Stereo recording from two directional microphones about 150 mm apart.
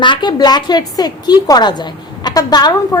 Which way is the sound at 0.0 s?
30° left (ahead or behind).